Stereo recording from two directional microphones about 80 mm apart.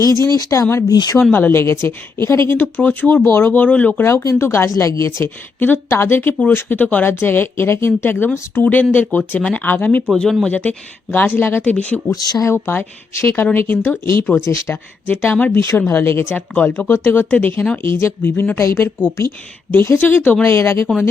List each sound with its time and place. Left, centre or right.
0.1 s speech: right
0.3 s speech: left
1.3 s speech: left
4.1 s a woman's voice: left
4.4 s a woman's voice: left
4.7 s a woman's voice: left
10.1 s speech: centre
10.5 s speech: centre
12.1 s speech: left
13.2 s a woman's voice: left
15.0 s a woman's voice: left
17.8 s a woman's voice: left